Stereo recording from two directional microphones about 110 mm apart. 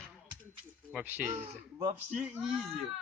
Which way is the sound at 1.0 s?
15° right (ahead or behind).